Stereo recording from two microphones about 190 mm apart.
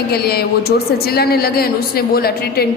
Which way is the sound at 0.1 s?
55° left (ahead or behind).